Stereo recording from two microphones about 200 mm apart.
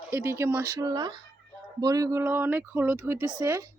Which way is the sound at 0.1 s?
15° right (ahead or behind).